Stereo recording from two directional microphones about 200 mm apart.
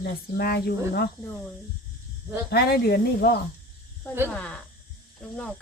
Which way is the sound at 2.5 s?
50° left (ahead or behind).